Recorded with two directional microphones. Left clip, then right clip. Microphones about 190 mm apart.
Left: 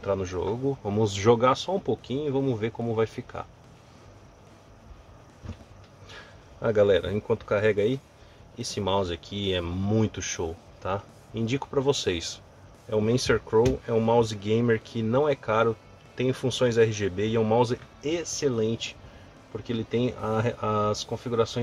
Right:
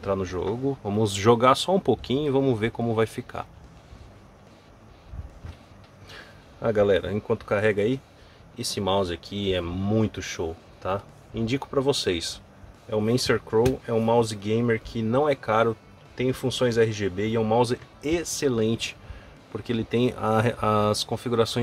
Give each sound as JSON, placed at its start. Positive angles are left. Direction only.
{"t": 0.0, "sound": "speech", "side_deg": -5}
{"t": 6.0, "sound": "speech", "side_deg": 0}